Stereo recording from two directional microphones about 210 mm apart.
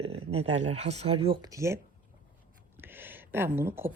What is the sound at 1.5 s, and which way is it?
Speech, 15° right (ahead or behind).